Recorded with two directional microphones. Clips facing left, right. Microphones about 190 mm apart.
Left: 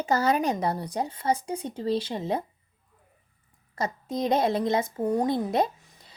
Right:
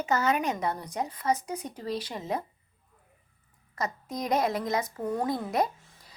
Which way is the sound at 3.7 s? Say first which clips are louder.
Left 3 dB; 30° left (ahead or behind).